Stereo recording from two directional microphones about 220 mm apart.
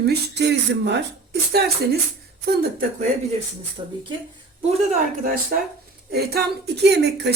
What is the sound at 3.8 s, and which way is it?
Speech, 20° right (ahead or behind).